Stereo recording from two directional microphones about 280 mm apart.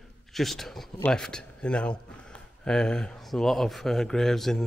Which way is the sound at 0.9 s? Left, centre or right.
Centre.